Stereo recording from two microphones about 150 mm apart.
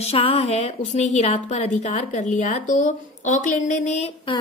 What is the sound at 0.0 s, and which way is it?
A woman's voice, 40° left (ahead or behind).